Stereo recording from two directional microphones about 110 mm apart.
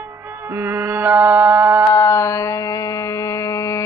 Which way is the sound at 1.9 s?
25° left (ahead or behind).